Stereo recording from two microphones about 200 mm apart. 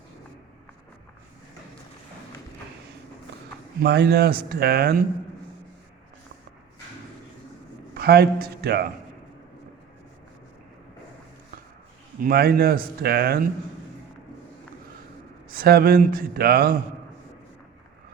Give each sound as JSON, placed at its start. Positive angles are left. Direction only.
{"t": 3.8, "sound": "speech", "side_deg": -55}
{"t": 7.9, "sound": "a man's voice", "side_deg": -55}
{"t": 12.2, "sound": "speech", "side_deg": -50}
{"t": 15.4, "sound": "speech", "side_deg": -50}